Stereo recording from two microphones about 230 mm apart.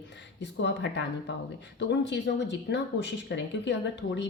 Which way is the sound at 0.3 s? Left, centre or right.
Left.